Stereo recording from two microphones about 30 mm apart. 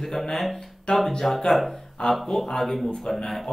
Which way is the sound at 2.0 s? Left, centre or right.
Left.